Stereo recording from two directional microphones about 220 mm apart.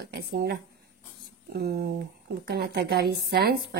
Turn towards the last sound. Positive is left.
turn(degrees=-45)  # may be behind; listen again after turning